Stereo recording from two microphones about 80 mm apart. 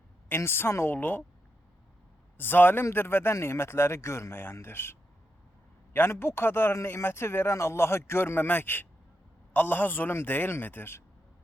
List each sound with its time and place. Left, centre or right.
0.3 s a man's voice: left
2.4 s a man's voice: left